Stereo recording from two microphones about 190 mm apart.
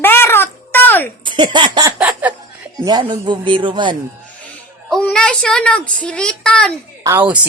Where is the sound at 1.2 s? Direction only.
25° right (ahead or behind).